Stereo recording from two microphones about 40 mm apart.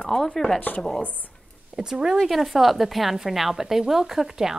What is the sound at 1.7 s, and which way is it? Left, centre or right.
Speech, centre.